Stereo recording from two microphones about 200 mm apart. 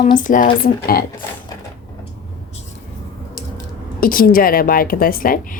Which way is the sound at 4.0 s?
45° left (ahead or behind).